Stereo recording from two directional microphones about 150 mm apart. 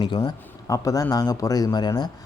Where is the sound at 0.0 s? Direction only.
30° left (ahead or behind).